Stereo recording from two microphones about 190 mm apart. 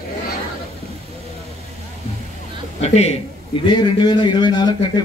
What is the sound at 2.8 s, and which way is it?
Speech, 35° left (ahead or behind).